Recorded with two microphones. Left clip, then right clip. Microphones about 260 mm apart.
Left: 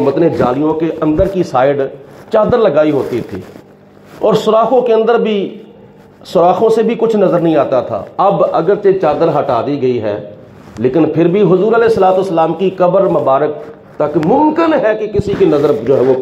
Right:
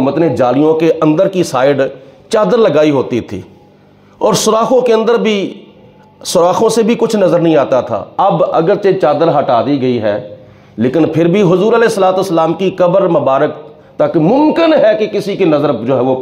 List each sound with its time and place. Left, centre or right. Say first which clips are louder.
0.0 s speech: even; right
4.2 s a man's voice: left 1 dB; right